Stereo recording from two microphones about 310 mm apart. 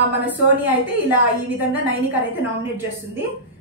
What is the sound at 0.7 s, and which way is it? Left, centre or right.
A woman's voice, centre.